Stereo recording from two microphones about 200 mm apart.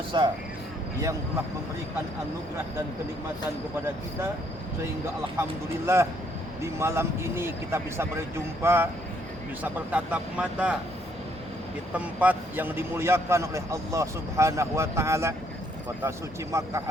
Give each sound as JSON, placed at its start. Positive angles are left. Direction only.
{"t": 0.1, "sound": "speech", "side_deg": -25}
{"t": 5.4, "sound": "a man's voice", "side_deg": -15}
{"t": 9.9, "sound": "speech", "side_deg": -5}
{"t": 11.9, "sound": "a man's voice", "side_deg": -5}